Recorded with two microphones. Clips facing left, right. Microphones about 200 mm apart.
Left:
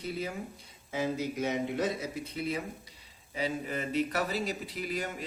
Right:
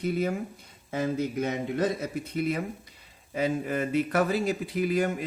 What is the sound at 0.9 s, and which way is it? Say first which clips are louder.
Speech: right 4 dB; 55° right (ahead or behind).